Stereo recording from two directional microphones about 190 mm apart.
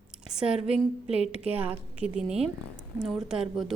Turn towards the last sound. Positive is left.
turn(degrees=0)  # may be behind; listen again after turning